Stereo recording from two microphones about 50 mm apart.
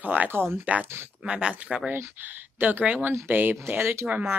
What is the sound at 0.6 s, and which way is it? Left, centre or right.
Speech, right.